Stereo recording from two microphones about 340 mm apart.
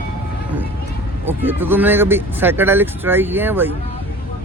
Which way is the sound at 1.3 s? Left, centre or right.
Centre.